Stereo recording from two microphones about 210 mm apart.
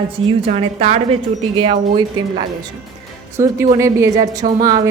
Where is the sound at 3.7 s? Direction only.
15° right (ahead or behind).